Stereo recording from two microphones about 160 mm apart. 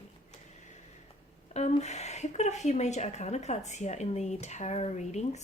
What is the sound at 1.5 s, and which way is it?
A woman's voice, 45° left (ahead or behind).